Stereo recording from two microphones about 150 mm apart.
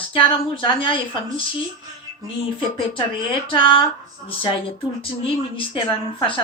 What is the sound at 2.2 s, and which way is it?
A woman's voice, 35° left (ahead or behind).